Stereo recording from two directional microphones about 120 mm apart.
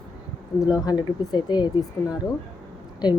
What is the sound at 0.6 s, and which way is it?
Speech, 30° left (ahead or behind).